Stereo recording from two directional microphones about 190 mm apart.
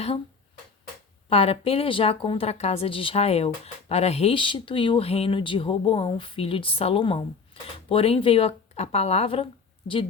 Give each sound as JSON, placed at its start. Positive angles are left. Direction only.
{"t": 1.3, "sound": "speech", "side_deg": 30}